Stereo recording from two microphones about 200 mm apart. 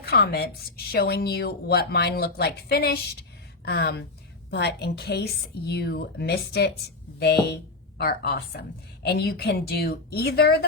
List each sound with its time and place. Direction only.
0.0 s a woman's voice: 55° left (ahead or behind)